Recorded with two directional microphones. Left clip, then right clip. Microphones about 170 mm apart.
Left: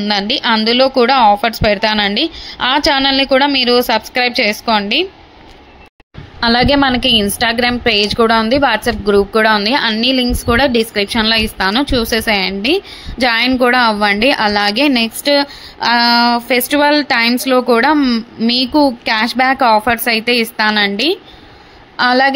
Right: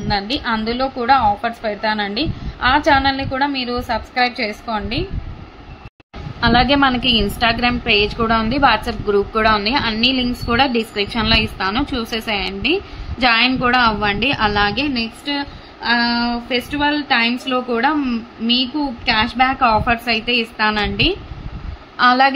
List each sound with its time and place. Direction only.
0.1 s a woman's voice: 35° left (ahead or behind)
6.4 s a woman's voice: 35° left (ahead or behind)